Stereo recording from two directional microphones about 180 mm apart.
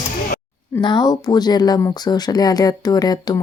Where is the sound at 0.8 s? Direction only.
25° left (ahead or behind).